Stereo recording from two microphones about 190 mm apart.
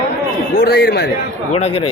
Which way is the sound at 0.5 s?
55° left (ahead or behind).